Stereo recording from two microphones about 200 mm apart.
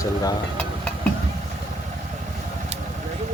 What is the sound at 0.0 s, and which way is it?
Stir, 15° left (ahead or behind).